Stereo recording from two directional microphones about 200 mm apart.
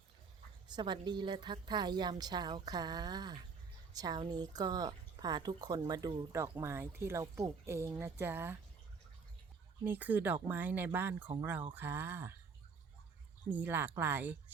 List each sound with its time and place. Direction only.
0.7 s speech: 20° right (ahead or behind)
9.8 s speech: 10° right (ahead or behind)
13.5 s speech: 10° right (ahead or behind)